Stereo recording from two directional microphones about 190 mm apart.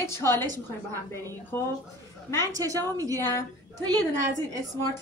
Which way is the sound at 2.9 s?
20° right (ahead or behind).